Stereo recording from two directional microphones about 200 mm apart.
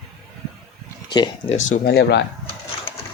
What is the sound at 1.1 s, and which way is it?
Speech, 25° left (ahead or behind).